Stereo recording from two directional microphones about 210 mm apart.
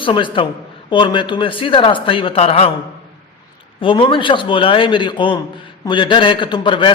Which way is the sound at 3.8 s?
25° left (ahead or behind).